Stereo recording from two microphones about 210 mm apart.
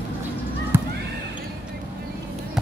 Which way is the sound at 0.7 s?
10° right (ahead or behind).